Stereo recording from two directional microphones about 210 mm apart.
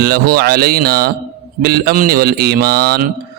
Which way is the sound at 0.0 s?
45° right (ahead or behind).